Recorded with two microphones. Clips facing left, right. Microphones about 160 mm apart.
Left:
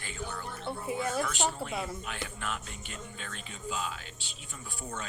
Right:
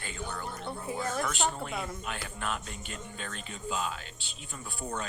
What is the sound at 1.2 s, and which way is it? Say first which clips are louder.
Speech: right 1 dB; 40° right (ahead or behind).